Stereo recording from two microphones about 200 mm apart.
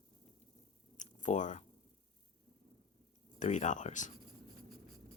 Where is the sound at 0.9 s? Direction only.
40° left (ahead or behind).